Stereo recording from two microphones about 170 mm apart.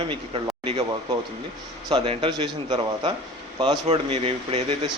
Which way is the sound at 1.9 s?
30° right (ahead or behind).